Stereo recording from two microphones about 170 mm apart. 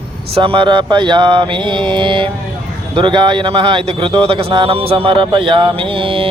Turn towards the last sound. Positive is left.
turn(degrees=-30)  # may be behind; listen again after turning